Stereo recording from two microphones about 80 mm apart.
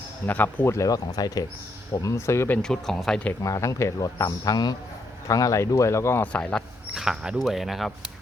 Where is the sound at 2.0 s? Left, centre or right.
Left.